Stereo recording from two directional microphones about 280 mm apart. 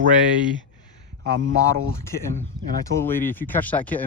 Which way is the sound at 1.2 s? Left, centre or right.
Right.